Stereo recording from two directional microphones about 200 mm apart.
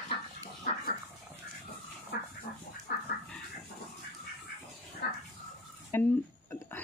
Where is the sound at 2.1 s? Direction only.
55° left (ahead or behind).